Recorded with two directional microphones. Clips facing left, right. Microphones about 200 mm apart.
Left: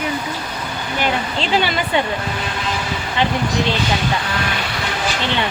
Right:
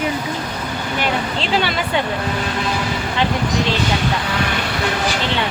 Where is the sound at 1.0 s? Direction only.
Centre (ahead or behind).